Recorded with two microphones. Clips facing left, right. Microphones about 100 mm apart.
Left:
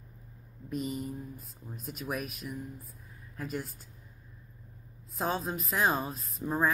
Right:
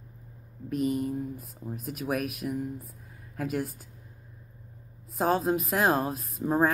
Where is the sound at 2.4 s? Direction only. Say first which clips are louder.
Right 8 dB; 40° right (ahead or behind).